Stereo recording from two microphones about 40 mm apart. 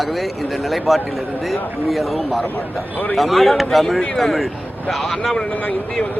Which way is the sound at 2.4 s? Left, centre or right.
Left.